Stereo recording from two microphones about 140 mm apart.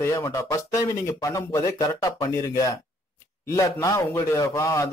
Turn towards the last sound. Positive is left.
turn(degrees=20)  # may be behind; listen again after turning